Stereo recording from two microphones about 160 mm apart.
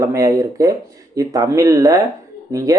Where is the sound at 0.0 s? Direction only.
20° right (ahead or behind).